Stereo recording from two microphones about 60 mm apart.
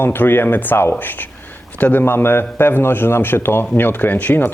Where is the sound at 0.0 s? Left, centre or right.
Left.